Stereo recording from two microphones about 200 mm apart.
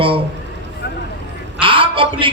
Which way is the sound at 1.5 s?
25° right (ahead or behind).